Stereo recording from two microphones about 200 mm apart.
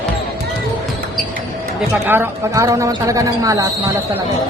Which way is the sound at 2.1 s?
10° right (ahead or behind).